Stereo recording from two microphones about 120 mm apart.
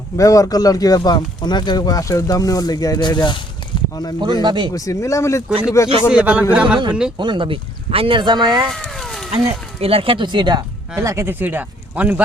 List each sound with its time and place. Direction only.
0.2 s speech: 30° left (ahead or behind)
4.2 s speech: 35° right (ahead or behind)
4.7 s speech: 25° left (ahead or behind)
6.1 s speech: 10° right (ahead or behind)
7.2 s speech: 40° right (ahead or behind)
8.6 s a sound: 5° left (ahead or behind)
9.8 s speech: 50° right (ahead or behind)
11.0 s speech: 25° right (ahead or behind)